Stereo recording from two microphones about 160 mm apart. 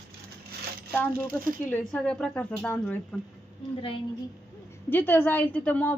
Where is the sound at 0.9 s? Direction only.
10° left (ahead or behind).